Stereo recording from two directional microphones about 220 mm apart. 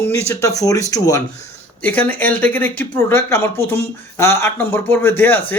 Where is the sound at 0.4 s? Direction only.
15° left (ahead or behind).